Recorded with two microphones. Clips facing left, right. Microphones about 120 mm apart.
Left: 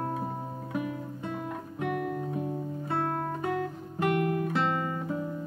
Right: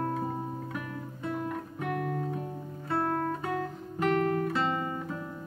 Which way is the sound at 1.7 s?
5° left (ahead or behind).